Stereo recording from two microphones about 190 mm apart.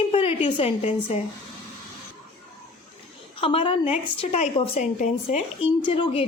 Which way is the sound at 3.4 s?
30° left (ahead or behind).